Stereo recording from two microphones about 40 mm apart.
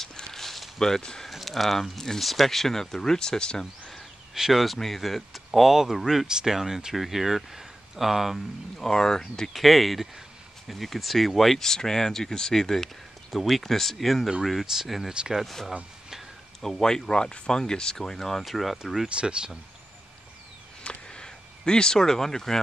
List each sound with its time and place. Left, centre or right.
0.0 s a sound: centre
0.7 s speech: centre
1.3 s speech: centre
4.3 s speech: centre
4.7 s speech: centre
8.7 s speech: centre
9.5 s speech: centre
16.6 s speech: centre
18.4 s speech: centre
19.0 s speech: right
20.8 s a sound: left